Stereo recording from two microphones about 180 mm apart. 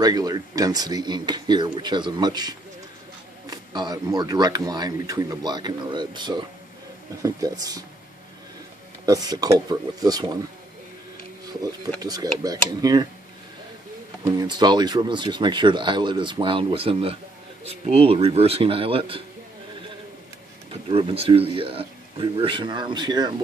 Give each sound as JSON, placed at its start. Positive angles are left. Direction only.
{"t": 0.0, "sound": "speech", "side_deg": -20}
{"t": 9.0, "sound": "speech", "side_deg": -20}
{"t": 12.0, "sound": "speech", "side_deg": -20}
{"t": 14.2, "sound": "a man's voice", "side_deg": -20}
{"t": 20.9, "sound": "speech", "side_deg": -30}